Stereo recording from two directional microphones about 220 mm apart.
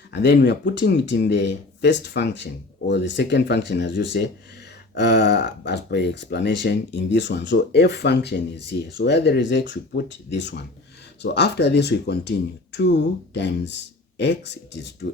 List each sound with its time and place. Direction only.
0.1 s speech: 50° left (ahead or behind)